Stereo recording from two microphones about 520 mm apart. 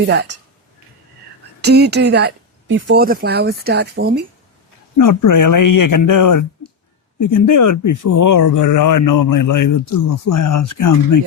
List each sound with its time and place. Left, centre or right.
0.1 s speech: centre
1.6 s speech: centre
4.9 s speech: left